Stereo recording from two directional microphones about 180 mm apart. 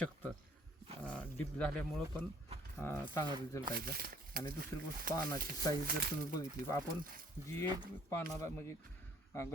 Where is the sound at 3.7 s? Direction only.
55° right (ahead or behind).